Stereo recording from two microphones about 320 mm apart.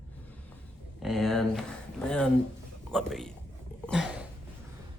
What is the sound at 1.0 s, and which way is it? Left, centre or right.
A man's voice, centre.